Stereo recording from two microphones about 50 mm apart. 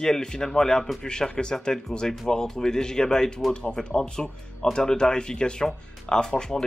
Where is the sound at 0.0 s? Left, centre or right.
Centre.